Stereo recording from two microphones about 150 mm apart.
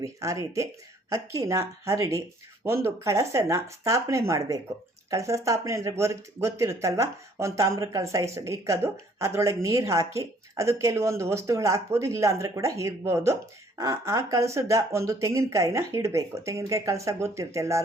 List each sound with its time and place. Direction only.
0.0 s speech: 20° right (ahead or behind)